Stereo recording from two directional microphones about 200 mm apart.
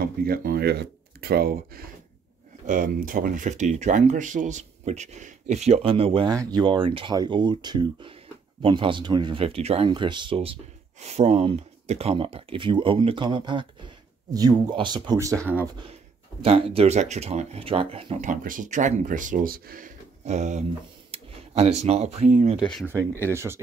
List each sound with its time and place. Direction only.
0.0 s speech: 50° right (ahead or behind); by 15.7 s 15° right (ahead or behind)
15.9 s speech: 30° right (ahead or behind)
18.3 s speech: 40° right (ahead or behind)
22.6 s speech: 5° left (ahead or behind)
23.3 s speech: 15° right (ahead or behind)